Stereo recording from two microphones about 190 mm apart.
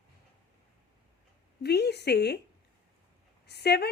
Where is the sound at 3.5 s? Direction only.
60° left (ahead or behind).